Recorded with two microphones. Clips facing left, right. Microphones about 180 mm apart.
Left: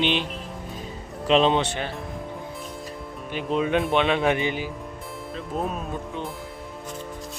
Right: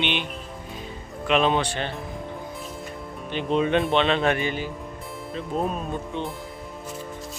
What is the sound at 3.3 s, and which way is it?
Speech, 5° left (ahead or behind).